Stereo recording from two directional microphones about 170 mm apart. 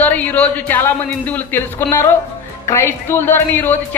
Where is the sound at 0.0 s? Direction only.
10° left (ahead or behind).